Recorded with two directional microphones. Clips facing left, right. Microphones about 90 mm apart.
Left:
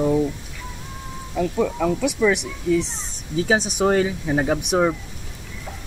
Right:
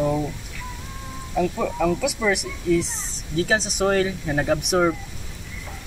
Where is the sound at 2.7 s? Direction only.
20° left (ahead or behind).